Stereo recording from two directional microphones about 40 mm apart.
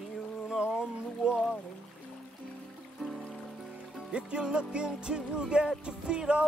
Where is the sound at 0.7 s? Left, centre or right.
Centre.